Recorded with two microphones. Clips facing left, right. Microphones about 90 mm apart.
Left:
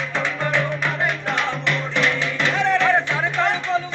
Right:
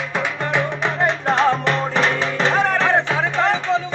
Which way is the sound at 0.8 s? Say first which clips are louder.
Right 4 dB; 30° right (ahead or behind).